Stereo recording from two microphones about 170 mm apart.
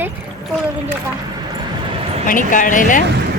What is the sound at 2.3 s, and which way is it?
Speech, 50° left (ahead or behind).